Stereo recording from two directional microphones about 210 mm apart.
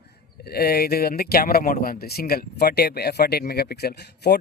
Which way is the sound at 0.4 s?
50° left (ahead or behind).